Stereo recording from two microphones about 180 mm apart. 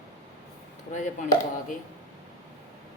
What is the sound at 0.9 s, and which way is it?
Speech, 45° left (ahead or behind).